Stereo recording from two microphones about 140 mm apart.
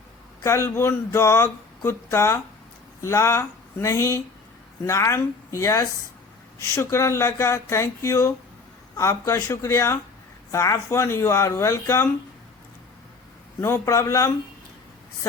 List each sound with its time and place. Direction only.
0.4 s a sound: 20° left (ahead or behind)
3.0 s speech: 20° left (ahead or behind)
13.6 s speech: 20° left (ahead or behind)